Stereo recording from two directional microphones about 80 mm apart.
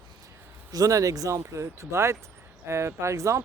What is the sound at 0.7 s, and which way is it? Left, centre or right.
Speech, right.